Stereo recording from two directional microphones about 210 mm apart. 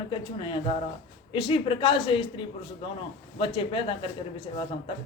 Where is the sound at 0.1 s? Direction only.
25° left (ahead or behind).